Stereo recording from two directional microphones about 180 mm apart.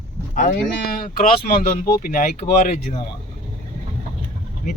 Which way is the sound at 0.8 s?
55° left (ahead or behind).